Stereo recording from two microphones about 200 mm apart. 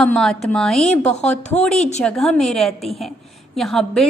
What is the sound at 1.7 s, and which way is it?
Speech, 35° left (ahead or behind).